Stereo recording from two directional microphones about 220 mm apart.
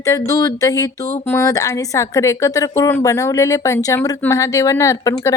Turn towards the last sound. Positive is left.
turn(degrees=15)  # may be behind; listen again after turning